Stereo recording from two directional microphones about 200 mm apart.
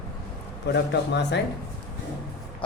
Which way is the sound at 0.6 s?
60° left (ahead or behind).